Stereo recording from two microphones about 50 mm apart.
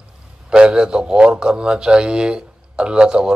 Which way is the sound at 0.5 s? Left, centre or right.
Centre.